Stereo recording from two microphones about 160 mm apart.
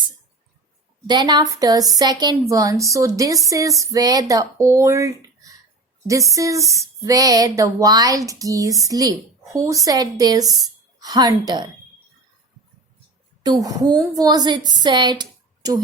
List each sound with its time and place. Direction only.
1.0 s a woman's voice: 25° right (ahead or behind)
13.4 s a woman's voice: 25° right (ahead or behind)